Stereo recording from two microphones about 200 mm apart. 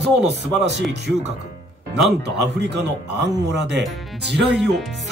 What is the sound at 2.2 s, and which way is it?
Speech, 60° right (ahead or behind).